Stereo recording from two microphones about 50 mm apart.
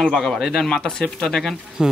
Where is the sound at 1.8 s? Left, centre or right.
Centre.